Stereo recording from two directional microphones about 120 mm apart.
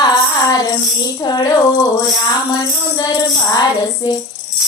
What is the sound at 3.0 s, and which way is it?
Child singing, 35° left (ahead or behind).